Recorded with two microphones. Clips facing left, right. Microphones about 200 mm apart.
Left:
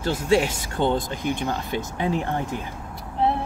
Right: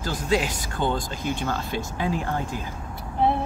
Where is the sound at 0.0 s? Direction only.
25° left (ahead or behind).